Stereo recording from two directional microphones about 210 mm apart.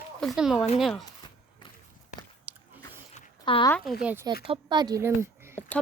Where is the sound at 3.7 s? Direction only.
5° left (ahead or behind).